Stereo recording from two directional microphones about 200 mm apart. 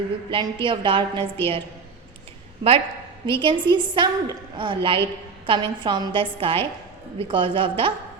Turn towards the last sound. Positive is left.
turn(degrees=-25)  # may be behind; listen again after turning